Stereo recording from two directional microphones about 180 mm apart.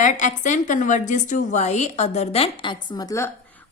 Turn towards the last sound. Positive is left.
turn(degrees=15)  # may be behind; listen again after turning